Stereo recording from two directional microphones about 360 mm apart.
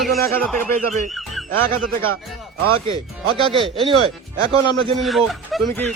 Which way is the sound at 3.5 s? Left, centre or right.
Centre.